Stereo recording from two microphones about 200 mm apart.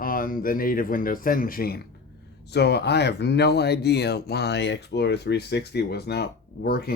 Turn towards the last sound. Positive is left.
turn(degrees=50)  # may be behind; listen again after turning